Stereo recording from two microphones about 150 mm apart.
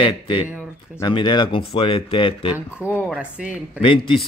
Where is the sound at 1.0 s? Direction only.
30° left (ahead or behind).